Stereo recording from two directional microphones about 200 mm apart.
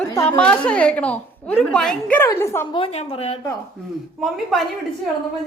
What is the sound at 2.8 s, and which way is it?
Speech, 30° left (ahead or behind).